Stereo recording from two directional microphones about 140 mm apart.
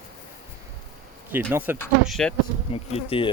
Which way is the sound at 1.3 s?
15° right (ahead or behind).